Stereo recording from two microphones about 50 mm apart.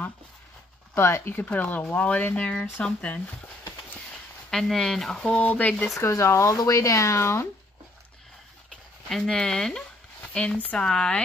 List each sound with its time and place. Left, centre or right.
0.9 s speech: left
1.3 s speech: left
4.5 s speech: centre
5.5 s speech: left
5.9 s speech: left
9.1 s speech: centre
10.6 s speech: left
10.9 s speech: centre